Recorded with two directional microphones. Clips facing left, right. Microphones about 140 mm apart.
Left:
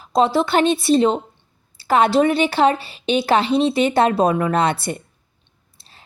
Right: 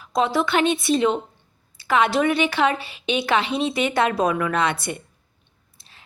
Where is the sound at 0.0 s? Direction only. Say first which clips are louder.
Left 4 dB; 30° left (ahead or behind).